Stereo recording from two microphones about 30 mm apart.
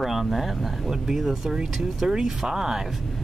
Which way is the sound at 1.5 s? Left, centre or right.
Right.